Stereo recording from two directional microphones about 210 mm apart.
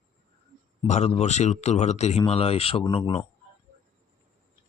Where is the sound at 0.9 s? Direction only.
30° left (ahead or behind).